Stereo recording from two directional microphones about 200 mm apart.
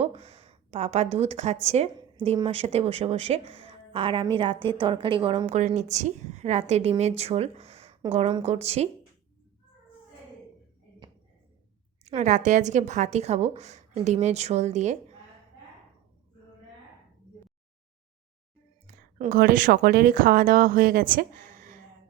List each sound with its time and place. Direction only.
0.0 s speech: 30° right (ahead or behind)
12.0 s speech: 35° right (ahead or behind)
19.2 s speech: 45° right (ahead or behind)